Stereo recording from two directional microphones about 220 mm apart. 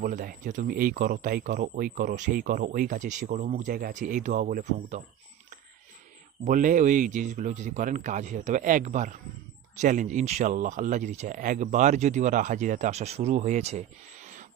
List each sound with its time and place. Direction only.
0.0 s speech: 35° right (ahead or behind)
6.4 s speech: 35° right (ahead or behind)